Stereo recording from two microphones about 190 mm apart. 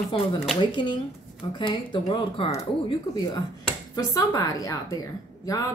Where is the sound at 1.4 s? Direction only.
25° left (ahead or behind).